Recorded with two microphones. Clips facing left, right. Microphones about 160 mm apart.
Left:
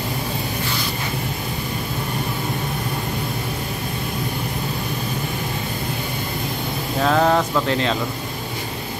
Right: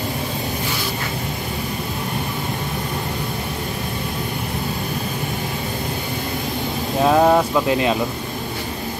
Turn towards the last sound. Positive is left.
turn(degrees=-10)  # may be behind; listen again after turning